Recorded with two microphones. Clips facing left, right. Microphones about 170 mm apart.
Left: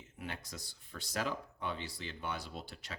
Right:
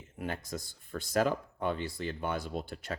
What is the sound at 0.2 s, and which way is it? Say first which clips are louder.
Speech: right 8 dB; 50° right (ahead or behind).